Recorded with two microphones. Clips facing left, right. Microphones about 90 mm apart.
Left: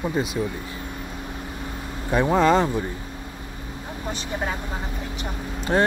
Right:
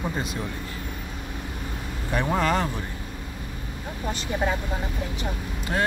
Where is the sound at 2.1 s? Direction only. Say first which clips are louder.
Left 6 dB; 20° left (ahead or behind).